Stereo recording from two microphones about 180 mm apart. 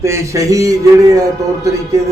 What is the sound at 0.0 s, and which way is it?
Speech, 15° right (ahead or behind).